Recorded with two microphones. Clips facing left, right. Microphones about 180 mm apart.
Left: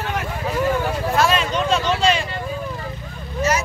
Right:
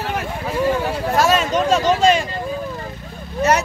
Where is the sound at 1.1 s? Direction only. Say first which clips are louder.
Right 3 dB; 45° right (ahead or behind).